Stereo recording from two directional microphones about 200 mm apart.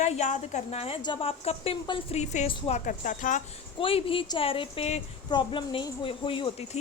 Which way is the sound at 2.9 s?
40° left (ahead or behind).